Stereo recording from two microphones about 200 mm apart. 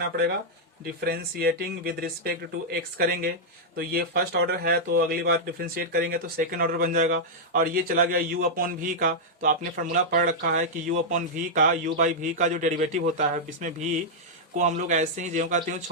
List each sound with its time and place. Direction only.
1.0 s a man's voice: 50° right (ahead or behind)